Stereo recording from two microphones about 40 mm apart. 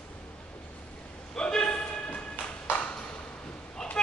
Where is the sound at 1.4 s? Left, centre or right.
Left.